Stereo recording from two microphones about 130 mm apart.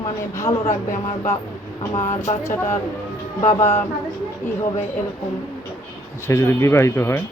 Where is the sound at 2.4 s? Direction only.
20° left (ahead or behind).